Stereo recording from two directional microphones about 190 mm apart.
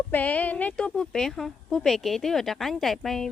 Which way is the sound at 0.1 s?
10° left (ahead or behind).